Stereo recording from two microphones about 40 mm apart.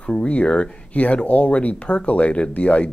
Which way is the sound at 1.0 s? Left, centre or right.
Left.